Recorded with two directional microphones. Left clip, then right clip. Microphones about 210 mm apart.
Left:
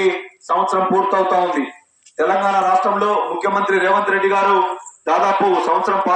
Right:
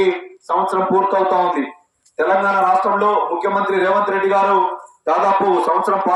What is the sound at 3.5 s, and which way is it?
A man's voice, 60° right (ahead or behind).